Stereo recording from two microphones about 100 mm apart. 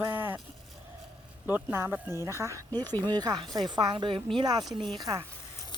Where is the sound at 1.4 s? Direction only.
20° right (ahead or behind); by 4.2 s 55° right (ahead or behind).